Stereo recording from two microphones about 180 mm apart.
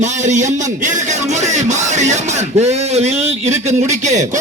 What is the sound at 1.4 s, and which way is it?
Music, 40° right (ahead or behind).